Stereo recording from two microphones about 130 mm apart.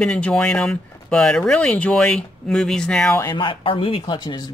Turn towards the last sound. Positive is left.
turn(degrees=35)  # may be behind; listen again after turning